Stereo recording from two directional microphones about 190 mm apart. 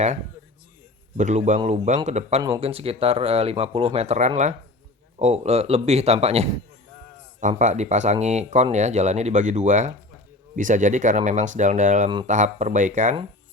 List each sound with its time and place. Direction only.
1.1 s speech: 40° right (ahead or behind)
7.6 s speech: 40° right (ahead or behind)